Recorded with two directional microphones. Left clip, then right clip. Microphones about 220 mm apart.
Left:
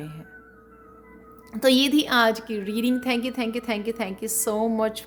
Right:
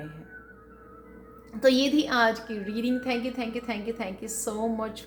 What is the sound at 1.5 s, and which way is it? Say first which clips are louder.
A woman's voice: left 2 dB; 45° left (ahead or behind).